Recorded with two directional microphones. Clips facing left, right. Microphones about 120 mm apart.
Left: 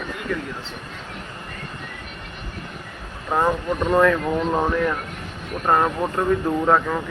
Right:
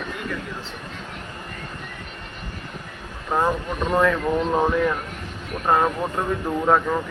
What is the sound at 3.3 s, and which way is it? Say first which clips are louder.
Speech: left 2 dB; centre (ahead or behind).